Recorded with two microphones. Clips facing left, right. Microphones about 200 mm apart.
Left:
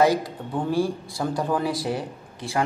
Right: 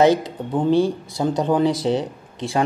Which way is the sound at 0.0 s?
20° right (ahead or behind).